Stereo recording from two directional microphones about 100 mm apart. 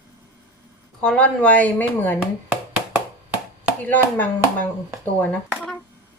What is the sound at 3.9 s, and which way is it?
Speech, 15° left (ahead or behind).